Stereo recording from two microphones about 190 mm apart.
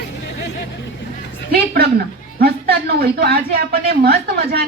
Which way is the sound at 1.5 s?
55° right (ahead or behind).